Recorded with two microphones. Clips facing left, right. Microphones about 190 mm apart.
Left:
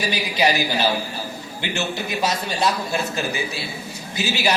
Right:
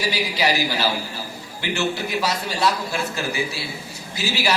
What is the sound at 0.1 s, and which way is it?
Speech, 20° left (ahead or behind).